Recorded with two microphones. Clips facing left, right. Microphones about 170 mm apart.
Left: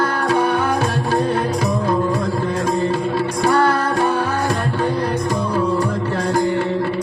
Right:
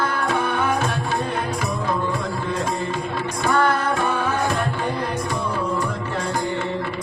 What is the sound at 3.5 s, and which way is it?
Music, 40° left (ahead or behind).